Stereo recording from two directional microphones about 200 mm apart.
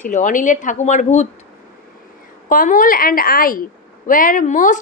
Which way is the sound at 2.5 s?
45° left (ahead or behind).